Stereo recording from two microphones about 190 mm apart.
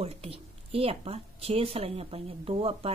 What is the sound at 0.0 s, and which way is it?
A woman's voice, 30° right (ahead or behind).